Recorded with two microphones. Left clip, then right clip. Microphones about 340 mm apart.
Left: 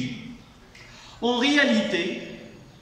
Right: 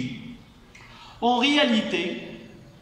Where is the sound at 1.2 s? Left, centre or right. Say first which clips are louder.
Right 1 dB; centre.